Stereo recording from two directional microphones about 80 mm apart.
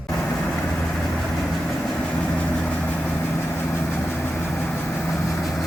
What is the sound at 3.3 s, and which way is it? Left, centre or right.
Vehicle, left.